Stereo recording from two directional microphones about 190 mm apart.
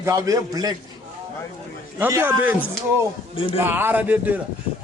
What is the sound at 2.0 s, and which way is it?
Speech, 10° right (ahead or behind).